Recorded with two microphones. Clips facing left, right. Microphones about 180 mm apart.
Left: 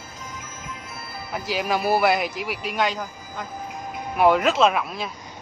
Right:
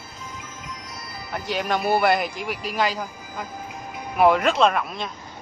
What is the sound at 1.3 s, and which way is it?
Speech, centre (ahead or behind).